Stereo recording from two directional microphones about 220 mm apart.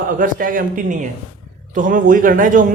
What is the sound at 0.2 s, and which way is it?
Speech, 40° right (ahead or behind).